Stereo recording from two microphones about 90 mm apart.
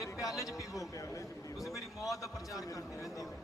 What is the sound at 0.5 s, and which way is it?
Speech, 40° left (ahead or behind).